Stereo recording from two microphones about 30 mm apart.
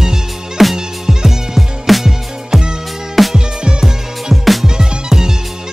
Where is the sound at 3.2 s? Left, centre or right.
Centre.